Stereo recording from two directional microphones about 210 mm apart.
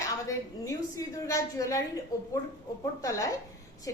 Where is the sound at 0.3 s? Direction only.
15° left (ahead or behind).